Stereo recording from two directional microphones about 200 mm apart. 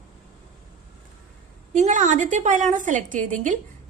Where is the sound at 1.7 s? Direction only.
35° right (ahead or behind).